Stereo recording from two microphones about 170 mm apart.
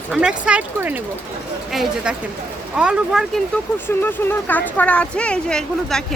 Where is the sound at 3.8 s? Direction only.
10° left (ahead or behind).